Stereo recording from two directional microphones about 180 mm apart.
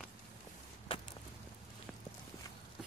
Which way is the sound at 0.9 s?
30° left (ahead or behind).